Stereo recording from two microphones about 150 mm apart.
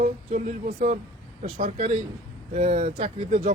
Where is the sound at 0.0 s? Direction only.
55° right (ahead or behind).